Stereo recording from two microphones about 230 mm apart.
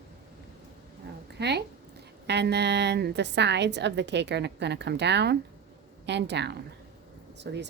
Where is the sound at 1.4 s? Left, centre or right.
Right.